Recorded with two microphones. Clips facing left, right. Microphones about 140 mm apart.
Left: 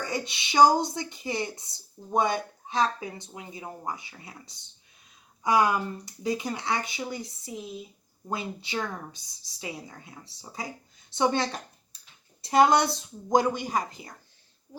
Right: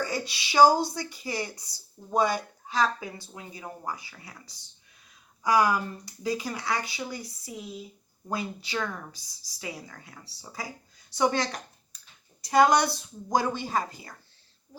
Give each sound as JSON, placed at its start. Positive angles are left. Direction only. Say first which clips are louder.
{"t": 0.0, "sound": "speech", "louder": "right 1 dB", "side_deg": 20}